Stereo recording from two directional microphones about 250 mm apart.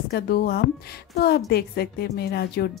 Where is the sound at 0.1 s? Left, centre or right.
Left.